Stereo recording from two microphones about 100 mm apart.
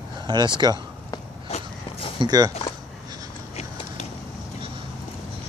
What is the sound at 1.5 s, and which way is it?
Walk, 90° left.